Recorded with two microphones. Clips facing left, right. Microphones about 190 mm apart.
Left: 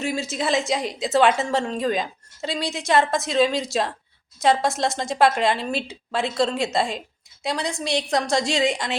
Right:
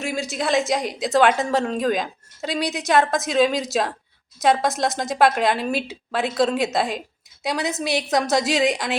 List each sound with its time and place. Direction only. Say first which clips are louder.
0.0 s a woman's voice: even; centre (ahead or behind)